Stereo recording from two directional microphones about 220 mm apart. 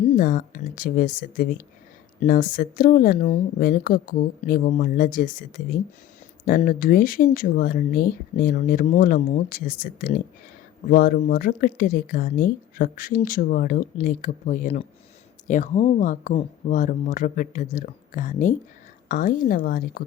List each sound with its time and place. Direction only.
0.2 s speech: 40° left (ahead or behind)